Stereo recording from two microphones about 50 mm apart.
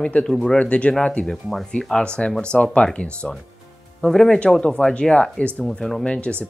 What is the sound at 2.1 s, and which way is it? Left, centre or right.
Speech, centre.